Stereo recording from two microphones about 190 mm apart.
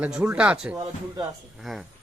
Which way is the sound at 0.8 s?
20° right (ahead or behind).